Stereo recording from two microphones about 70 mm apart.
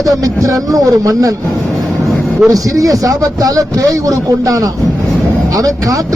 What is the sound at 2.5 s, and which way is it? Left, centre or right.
Speech, right.